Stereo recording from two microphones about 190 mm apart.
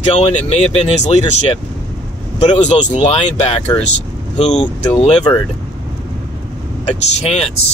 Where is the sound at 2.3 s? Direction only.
35° left (ahead or behind).